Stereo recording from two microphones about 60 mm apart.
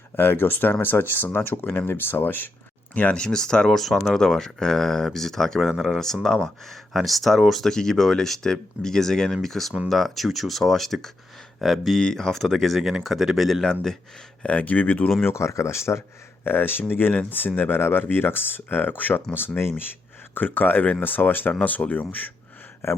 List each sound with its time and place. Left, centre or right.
0.2 s speech: left
2.9 s speech: left; by 13.6 s centre
14.4 s speech: left
15.2 s speech: left
22.8 s speech: left